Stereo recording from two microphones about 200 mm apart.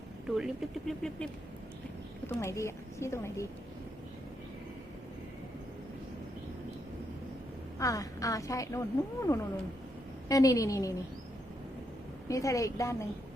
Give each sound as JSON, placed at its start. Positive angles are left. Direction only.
{"t": 0.3, "sound": "speech", "side_deg": 0}
{"t": 2.2, "sound": "speech", "side_deg": 10}
{"t": 7.8, "sound": "speech", "side_deg": 15}
{"t": 12.3, "sound": "speech", "side_deg": 15}